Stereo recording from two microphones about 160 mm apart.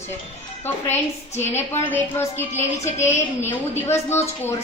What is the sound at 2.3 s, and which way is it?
Speech, 45° left (ahead or behind).